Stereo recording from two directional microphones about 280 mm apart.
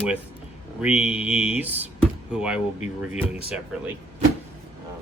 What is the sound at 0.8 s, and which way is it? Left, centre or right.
Speech, centre.